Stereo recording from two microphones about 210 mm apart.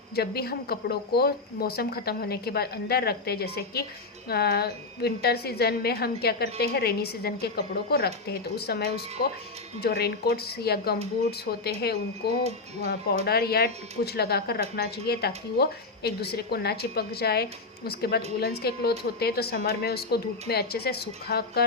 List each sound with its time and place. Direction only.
0.2 s a woman's voice: 50° left (ahead or behind)